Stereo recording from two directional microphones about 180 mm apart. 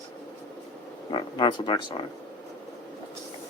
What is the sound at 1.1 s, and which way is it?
Speech, 25° left (ahead or behind).